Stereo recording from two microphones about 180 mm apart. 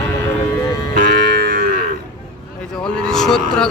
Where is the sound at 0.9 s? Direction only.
55° right (ahead or behind).